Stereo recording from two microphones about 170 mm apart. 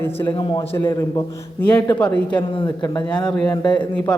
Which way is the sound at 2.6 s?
25° left (ahead or behind).